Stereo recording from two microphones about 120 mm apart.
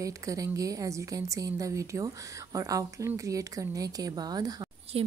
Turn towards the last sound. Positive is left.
turn(degrees=-55)  # may be behind; listen again after turning